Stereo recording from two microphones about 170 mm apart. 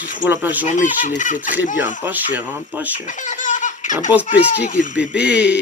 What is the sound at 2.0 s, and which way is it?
Speech, 10° right (ahead or behind).